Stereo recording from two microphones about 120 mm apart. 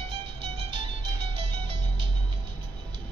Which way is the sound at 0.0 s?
50° right (ahead or behind).